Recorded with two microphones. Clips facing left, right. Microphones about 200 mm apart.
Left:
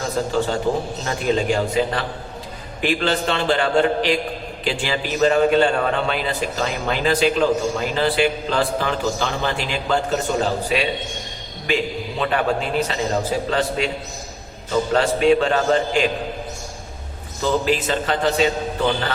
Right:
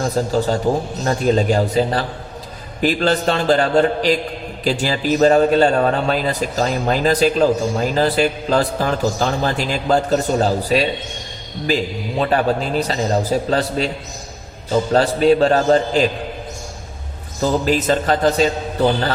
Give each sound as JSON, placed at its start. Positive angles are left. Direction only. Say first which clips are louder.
{"t": 0.2, "sound": "a man's voice", "louder": "right 1 dB", "side_deg": -40}
{"t": 14.9, "sound": "a man's voice", "louder": "right 3 dB", "side_deg": -35}
{"t": 17.4, "sound": "a man's voice", "louder": "right 3 dB", "side_deg": -40}